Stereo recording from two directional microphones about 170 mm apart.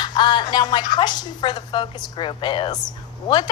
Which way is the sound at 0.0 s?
25° left (ahead or behind).